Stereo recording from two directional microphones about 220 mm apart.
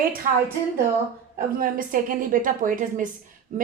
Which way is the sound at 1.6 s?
40° right (ahead or behind).